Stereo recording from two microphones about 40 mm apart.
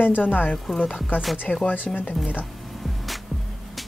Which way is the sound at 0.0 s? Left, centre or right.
Left.